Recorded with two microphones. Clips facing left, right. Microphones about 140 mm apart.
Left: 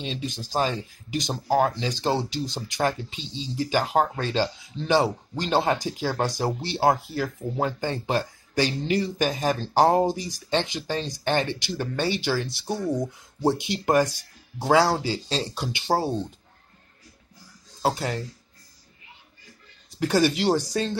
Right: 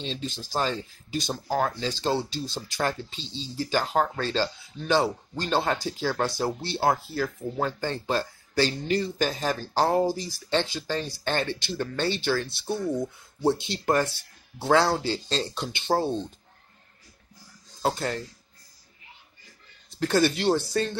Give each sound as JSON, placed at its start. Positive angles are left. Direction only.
{"t": 0.0, "sound": "speech", "side_deg": 15}
{"t": 17.9, "sound": "speech", "side_deg": 10}
{"t": 19.9, "sound": "speech", "side_deg": 15}